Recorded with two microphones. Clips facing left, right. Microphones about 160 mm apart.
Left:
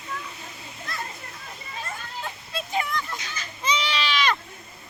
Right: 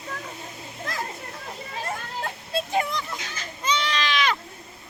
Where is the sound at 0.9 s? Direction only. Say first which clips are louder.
Right 3 dB; 90° right.